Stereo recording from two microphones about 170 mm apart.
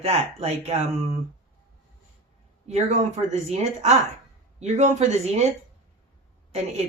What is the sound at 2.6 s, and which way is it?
A woman's voice, 40° right (ahead or behind).